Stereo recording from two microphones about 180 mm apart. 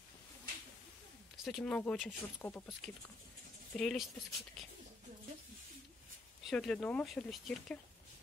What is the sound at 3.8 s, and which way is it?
Speech, centre (ahead or behind).